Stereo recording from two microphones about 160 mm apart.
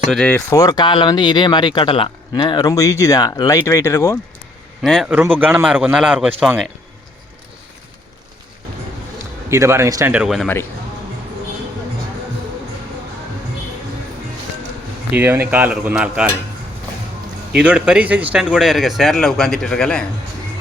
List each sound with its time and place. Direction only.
0.1 s speech: 5° left (ahead or behind)
0.3 s speech: 20° left (ahead or behind)
4.8 s speech: centre (ahead or behind)
9.5 s speech: 15° right (ahead or behind)
10.1 s speech: 5° right (ahead or behind)
15.1 s speech: 10° right (ahead or behind)
17.6 s speech: 5° right (ahead or behind)